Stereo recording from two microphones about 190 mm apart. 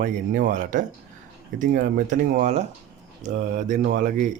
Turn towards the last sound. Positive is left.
turn(degrees=-40)  # may be behind; listen again after turning